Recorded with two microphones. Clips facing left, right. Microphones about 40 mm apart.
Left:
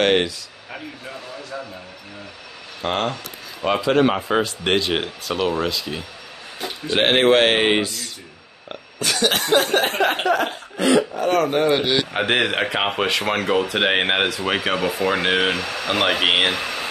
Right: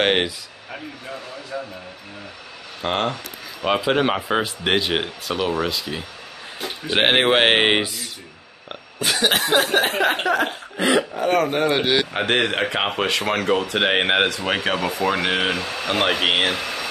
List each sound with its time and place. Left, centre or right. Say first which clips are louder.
0.0 s speech: left 1 dB; centre
1.5 s a sound: right 2 dB; centre
2.8 s speech: even; centre
6.9 s speech: left 1 dB; centre
10.8 s speech: left 2 dB; centre
12.1 s speech: left 1 dB; centre